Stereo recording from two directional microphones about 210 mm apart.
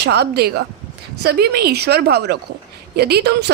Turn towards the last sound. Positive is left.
turn(degrees=-50)  # may be behind; listen again after turning